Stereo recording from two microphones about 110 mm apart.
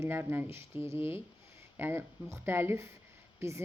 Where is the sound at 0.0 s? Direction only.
20° right (ahead or behind).